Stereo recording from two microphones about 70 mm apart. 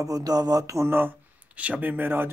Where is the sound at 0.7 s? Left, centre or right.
Right.